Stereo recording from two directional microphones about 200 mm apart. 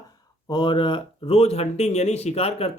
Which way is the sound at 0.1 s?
20° left (ahead or behind).